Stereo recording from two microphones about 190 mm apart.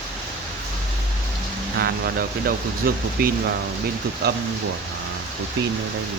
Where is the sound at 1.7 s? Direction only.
55° right (ahead or behind).